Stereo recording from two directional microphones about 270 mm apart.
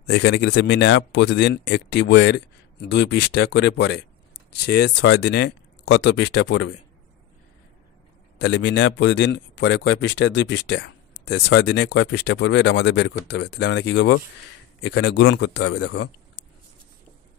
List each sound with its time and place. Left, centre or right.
0.0 s speech: left
8.4 s speech: left